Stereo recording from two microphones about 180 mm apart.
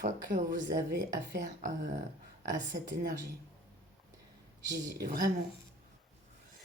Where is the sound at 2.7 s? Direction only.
60° right (ahead or behind).